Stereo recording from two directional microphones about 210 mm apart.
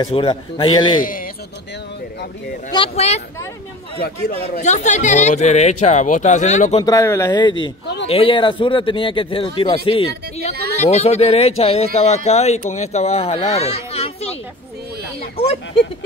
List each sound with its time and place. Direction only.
0.0 s speech: 25° left (ahead or behind)
1.0 s speech: 40° left (ahead or behind)
2.7 s speech: 25° left (ahead or behind)
4.6 s speech: 35° left (ahead or behind)
6.8 s speech: 15° left (ahead or behind)
7.8 s a sound: 55° left (ahead or behind)
8.1 s speech: 25° left (ahead or behind)